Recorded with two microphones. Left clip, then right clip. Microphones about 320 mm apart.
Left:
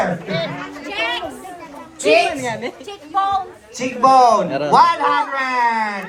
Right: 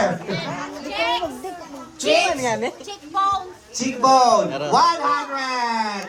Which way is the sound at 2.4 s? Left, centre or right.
Right.